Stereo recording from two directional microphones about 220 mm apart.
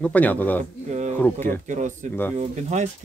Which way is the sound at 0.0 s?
5° left (ahead or behind).